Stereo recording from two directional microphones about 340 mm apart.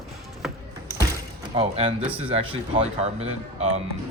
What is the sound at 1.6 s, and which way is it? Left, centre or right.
Speech, centre.